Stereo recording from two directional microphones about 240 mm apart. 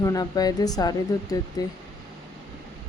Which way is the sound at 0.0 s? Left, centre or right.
Centre.